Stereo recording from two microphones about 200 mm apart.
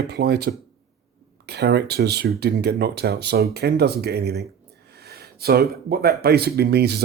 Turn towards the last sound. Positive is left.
turn(degrees=-55)  # may be behind; listen again after turning